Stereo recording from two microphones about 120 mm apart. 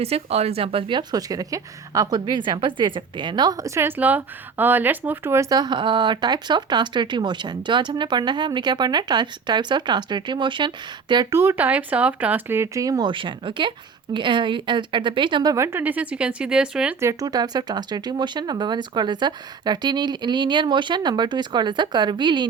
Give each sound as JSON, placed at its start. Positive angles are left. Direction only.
{"t": 0.0, "sound": "speech", "side_deg": -55}
{"t": 3.8, "sound": "speech", "side_deg": -15}
{"t": 11.3, "sound": "speech", "side_deg": -20}
{"t": 13.1, "sound": "speech", "side_deg": -45}
{"t": 15.5, "sound": "speech", "side_deg": -20}
{"t": 17.0, "sound": "speech", "side_deg": -25}